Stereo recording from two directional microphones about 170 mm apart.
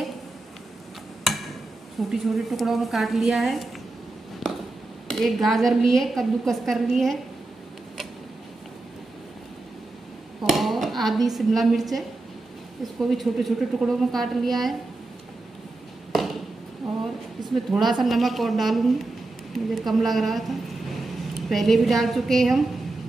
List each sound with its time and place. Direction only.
2.0 s a woman's voice: centre (ahead or behind)
4.4 s a sound: centre (ahead or behind)
5.1 s a woman's voice: centre (ahead or behind)
10.5 s a woman's voice: centre (ahead or behind)
17.4 s a woman's voice: centre (ahead or behind)